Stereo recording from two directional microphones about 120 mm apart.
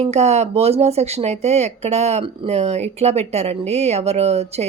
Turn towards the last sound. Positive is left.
turn(degrees=-60)  # may be behind; listen again after turning